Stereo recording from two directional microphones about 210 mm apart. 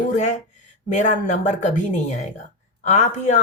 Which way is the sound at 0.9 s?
35° left (ahead or behind).